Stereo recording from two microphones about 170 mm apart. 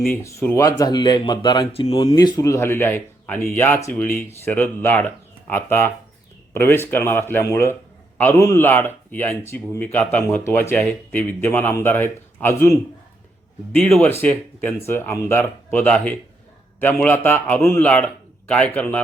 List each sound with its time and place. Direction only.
0.2 s a man's voice: 15° left (ahead or behind)